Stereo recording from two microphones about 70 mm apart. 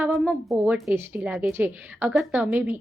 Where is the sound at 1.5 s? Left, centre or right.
Right.